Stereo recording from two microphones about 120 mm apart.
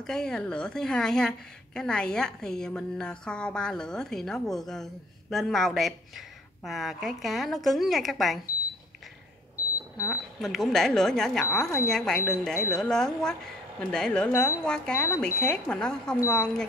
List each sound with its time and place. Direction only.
0.0 s a woman's voice: 5° left (ahead or behind)
10.0 s a woman's voice: centre (ahead or behind)